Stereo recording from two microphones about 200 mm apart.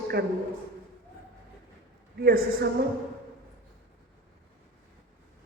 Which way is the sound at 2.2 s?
50° right (ahead or behind).